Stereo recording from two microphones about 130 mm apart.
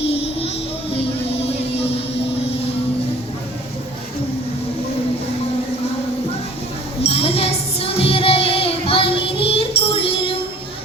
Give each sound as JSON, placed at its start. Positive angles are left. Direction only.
{"t": 0.0, "sound": "music", "side_deg": 50}
{"t": 7.0, "sound": "music", "side_deg": 50}